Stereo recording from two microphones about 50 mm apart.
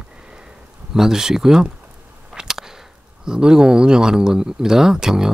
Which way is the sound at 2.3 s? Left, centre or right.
Centre.